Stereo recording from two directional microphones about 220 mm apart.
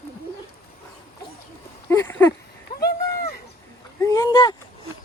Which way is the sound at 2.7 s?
45° left (ahead or behind).